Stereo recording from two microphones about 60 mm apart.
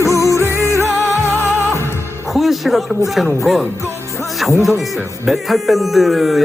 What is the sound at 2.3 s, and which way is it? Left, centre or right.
Speech, centre.